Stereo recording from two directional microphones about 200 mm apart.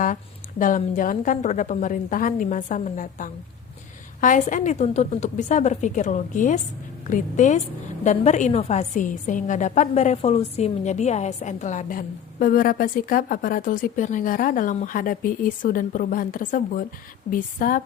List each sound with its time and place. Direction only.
0.6 s a woman's voice: 40° left (ahead or behind)